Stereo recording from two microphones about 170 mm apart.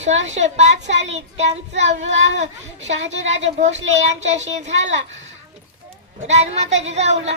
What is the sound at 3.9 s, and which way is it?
Speech, 40° right (ahead or behind).